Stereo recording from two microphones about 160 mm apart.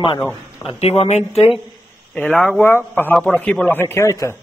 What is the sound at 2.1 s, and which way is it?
Speech, 10° left (ahead or behind).